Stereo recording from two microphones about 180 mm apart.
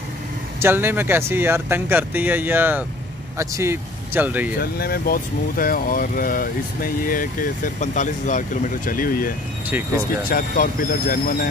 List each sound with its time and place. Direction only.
0.6 s speech: 10° right (ahead or behind)
4.6 s speech: 60° left (ahead or behind)
10.3 s speech: 50° left (ahead or behind)